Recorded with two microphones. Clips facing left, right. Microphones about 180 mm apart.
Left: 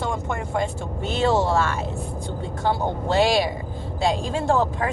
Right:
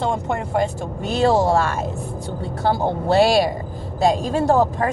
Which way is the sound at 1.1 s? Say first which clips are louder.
Right 4 dB; 40° right (ahead or behind).